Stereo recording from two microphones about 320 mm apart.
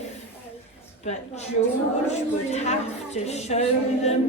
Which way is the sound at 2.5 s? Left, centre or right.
Centre.